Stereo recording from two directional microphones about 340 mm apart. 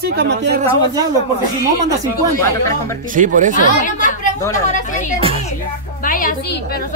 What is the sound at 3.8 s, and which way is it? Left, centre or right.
A woman's voice, left.